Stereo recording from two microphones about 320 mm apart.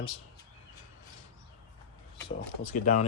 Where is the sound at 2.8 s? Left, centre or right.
Left.